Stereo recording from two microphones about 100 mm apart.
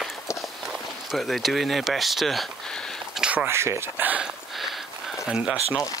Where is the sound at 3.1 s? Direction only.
10° right (ahead or behind).